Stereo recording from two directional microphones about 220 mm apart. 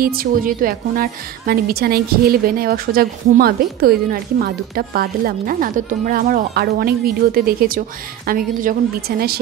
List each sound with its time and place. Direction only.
0.0 s a woman's voice: 40° right (ahead or behind)